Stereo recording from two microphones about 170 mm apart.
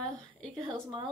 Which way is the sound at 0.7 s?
30° right (ahead or behind).